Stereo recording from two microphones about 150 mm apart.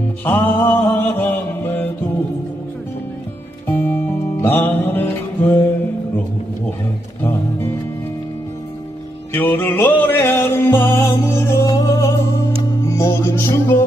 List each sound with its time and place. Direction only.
0.2 s music: 10° left (ahead or behind)
3.7 s music: 15° left (ahead or behind)
9.3 s music: 15° left (ahead or behind)